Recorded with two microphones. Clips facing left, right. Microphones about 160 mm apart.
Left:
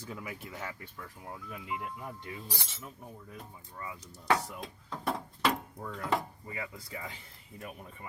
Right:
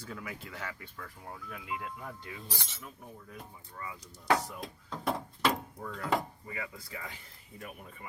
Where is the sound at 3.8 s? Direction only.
20° left (ahead or behind).